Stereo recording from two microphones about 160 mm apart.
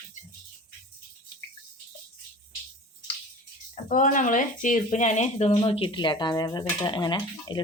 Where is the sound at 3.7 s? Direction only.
55° left (ahead or behind).